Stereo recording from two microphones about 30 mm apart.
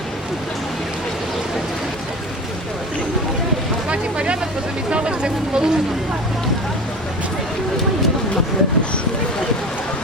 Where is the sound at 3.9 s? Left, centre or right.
Right.